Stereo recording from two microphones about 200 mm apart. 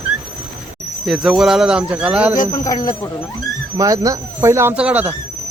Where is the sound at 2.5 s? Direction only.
20° left (ahead or behind).